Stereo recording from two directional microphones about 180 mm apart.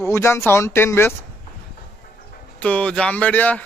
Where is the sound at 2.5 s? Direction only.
5° left (ahead or behind).